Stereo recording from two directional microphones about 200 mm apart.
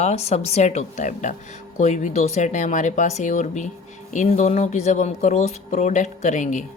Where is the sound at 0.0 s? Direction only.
35° left (ahead or behind).